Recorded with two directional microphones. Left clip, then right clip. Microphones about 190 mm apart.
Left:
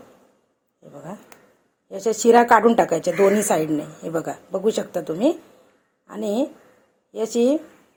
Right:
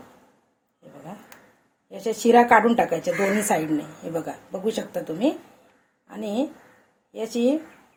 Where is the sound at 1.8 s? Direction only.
45° left (ahead or behind).